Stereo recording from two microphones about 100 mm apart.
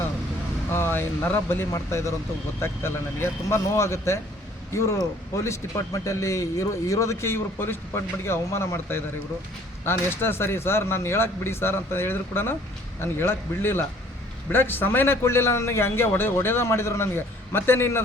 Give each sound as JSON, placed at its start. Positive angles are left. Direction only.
{"t": 0.7, "sound": "speech", "side_deg": 25}
{"t": 5.4, "sound": "speech", "side_deg": 30}